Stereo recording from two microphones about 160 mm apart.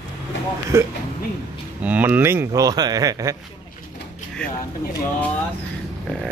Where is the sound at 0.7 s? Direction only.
20° right (ahead or behind).